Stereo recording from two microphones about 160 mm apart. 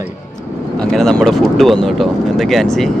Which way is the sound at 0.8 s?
5° left (ahead or behind).